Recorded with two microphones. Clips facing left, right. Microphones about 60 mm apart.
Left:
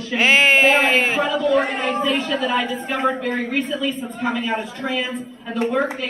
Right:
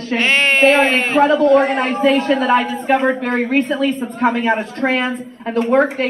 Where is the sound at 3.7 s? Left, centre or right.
Right.